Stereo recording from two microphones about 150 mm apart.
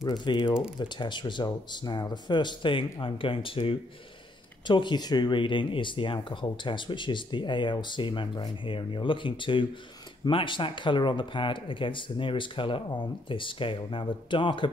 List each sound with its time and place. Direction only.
0.0 s speech: 30° left (ahead or behind)